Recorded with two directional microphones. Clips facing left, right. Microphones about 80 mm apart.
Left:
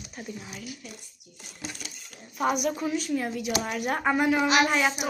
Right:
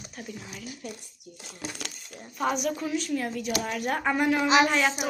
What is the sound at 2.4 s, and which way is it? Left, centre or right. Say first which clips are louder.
A woman's voice: left 1 dB; centre.